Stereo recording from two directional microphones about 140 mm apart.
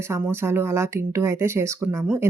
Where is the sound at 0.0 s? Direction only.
15° right (ahead or behind).